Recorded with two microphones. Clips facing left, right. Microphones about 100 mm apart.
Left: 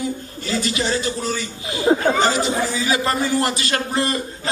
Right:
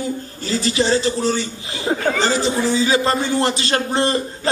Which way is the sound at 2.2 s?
30° right (ahead or behind).